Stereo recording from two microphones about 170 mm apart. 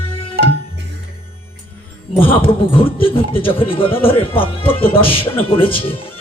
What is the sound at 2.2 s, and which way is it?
Speech, 30° left (ahead or behind).